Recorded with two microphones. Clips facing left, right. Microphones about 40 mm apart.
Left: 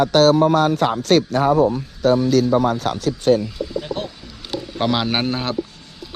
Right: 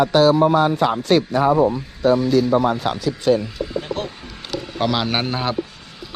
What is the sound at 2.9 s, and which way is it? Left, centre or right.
Speech, left.